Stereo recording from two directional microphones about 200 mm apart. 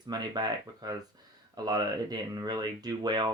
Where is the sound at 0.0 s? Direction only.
20° right (ahead or behind).